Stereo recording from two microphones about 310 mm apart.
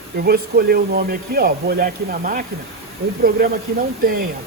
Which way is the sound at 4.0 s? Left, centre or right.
Right.